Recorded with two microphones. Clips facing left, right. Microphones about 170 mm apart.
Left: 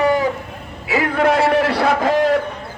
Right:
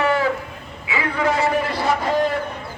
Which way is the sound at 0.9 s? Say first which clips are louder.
Left 5 dB; 50° left (ahead or behind).